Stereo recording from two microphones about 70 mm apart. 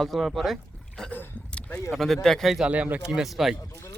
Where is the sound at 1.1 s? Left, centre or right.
Left.